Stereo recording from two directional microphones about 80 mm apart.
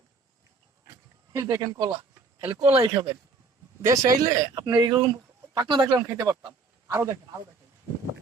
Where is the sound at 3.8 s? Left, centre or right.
Right.